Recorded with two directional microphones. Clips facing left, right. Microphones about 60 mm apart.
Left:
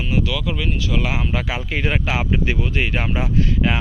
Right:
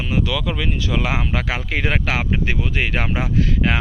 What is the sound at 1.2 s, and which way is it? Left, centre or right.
Speech, right.